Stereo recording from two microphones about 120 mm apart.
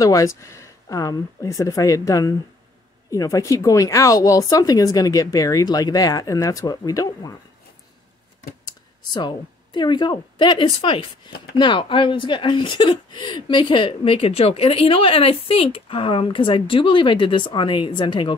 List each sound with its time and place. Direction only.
0.0 s speech: 25° left (ahead or behind)
8.6 s speech: 35° left (ahead or behind)